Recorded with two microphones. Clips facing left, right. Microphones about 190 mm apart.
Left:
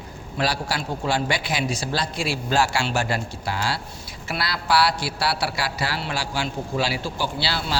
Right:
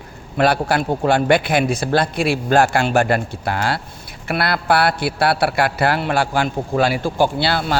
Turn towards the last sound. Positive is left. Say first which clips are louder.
# right 7 dB
turn(degrees=-55)  # may be behind; listen again after turning